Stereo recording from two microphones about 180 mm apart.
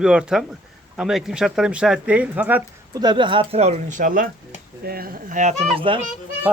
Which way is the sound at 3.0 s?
25° right (ahead or behind).